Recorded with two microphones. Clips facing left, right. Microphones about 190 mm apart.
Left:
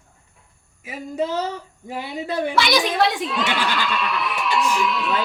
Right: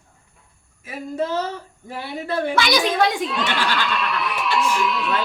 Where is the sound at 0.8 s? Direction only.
15° left (ahead or behind).